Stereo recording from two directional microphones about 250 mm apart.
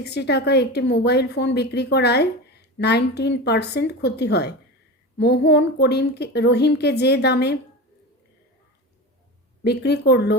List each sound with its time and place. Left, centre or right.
0.0 s a woman's voice: left
9.6 s a woman's voice: left